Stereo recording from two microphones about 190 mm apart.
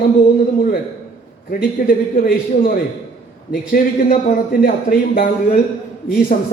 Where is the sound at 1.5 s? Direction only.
50° left (ahead or behind).